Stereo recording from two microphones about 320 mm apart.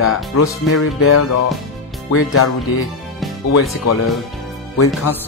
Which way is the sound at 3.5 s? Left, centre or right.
Left.